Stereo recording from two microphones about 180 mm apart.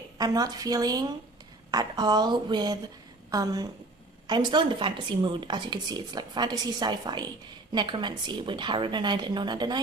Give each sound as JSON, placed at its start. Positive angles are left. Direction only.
{"t": 0.2, "sound": "a woman's voice", "side_deg": -20}